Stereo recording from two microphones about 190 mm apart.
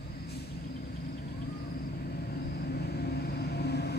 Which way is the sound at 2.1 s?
55° left (ahead or behind).